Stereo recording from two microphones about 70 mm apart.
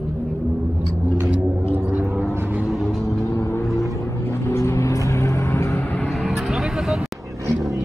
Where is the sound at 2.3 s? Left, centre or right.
Right.